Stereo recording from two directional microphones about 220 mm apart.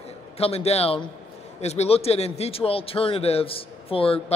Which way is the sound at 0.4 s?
30° left (ahead or behind).